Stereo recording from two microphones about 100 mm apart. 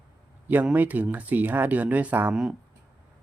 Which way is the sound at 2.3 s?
5° right (ahead or behind).